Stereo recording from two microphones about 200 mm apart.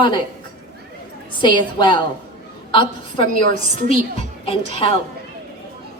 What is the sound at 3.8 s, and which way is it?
Speech, 40° right (ahead or behind).